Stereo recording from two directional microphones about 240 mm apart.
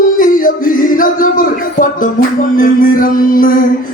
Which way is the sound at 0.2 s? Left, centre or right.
Left.